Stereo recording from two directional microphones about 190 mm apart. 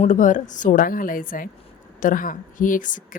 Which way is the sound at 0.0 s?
40° left (ahead or behind).